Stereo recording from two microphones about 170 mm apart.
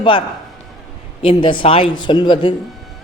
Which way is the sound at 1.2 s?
30° left (ahead or behind).